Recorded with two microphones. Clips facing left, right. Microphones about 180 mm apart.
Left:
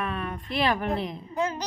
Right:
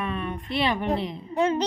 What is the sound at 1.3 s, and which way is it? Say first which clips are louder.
Speech: right 6 dB; 30° right (ahead or behind).